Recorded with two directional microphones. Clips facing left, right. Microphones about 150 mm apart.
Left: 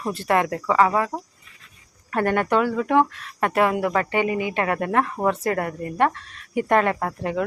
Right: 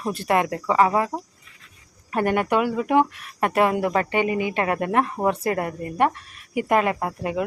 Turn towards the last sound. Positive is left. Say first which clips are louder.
# even
turn(degrees=-15)  # may be behind; listen again after turning